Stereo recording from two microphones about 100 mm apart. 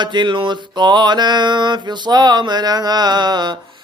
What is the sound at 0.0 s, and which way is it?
Music, 50° right (ahead or behind).